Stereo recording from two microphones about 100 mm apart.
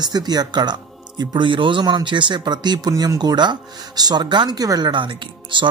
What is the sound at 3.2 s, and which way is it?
Speech, 45° right (ahead or behind).